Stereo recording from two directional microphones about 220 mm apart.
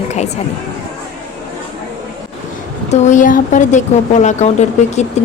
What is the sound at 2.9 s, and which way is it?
Speech, 35° left (ahead or behind).